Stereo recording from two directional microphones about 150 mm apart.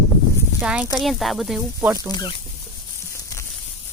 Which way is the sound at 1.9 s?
25° left (ahead or behind).